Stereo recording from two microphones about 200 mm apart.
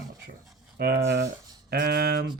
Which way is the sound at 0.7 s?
55° right (ahead or behind).